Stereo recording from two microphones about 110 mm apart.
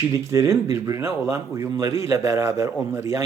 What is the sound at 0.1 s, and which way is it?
Speech, 25° right (ahead or behind).